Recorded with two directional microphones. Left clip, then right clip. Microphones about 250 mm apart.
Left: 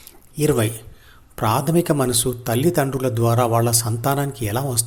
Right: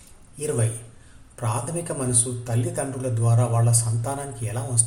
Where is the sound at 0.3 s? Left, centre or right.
Left.